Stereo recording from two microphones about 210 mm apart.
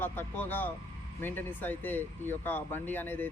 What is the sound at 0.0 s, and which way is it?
Speech, 10° left (ahead or behind).